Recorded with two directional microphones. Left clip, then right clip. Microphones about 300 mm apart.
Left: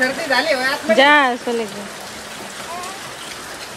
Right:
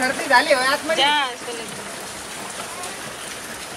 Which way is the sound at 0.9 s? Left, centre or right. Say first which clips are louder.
Left 10 dB; left.